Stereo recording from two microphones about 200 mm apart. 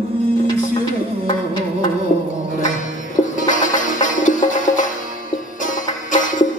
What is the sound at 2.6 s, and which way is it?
Music, 40° left (ahead or behind).